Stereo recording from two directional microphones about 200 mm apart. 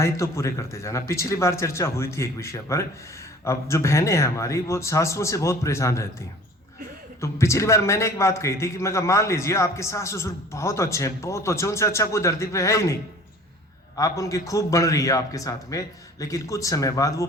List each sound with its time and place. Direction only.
0.0 s a man's voice: 15° left (ahead or behind)
7.2 s a man's voice: 15° left (ahead or behind)